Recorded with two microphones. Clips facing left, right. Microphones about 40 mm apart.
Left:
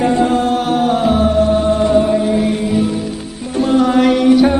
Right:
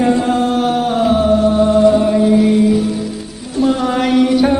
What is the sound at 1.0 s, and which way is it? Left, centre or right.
Music, left.